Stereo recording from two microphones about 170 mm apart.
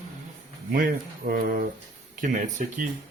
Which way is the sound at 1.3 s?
60° right (ahead or behind).